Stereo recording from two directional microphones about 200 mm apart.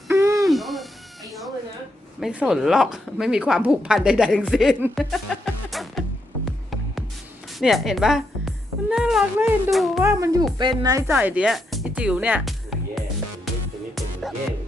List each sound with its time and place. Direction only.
0.1 s owl: 15° right (ahead or behind)
0.3 s owl: centre (ahead or behind)
2.2 s a woman's voice: 5° right (ahead or behind)
6.4 s music: centre (ahead or behind)
7.6 s a woman's voice: centre (ahead or behind)
10.0 s speech: 15° right (ahead or behind)
13.9 s music: centre (ahead or behind)